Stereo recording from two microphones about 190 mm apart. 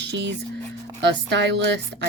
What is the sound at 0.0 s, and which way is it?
A woman's voice, 70° right (ahead or behind).